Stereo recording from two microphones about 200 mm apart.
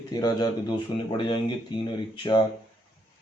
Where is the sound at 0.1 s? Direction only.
20° left (ahead or behind).